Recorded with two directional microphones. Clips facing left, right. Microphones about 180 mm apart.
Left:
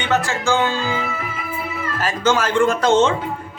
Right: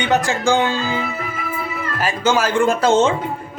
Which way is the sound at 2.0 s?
10° right (ahead or behind).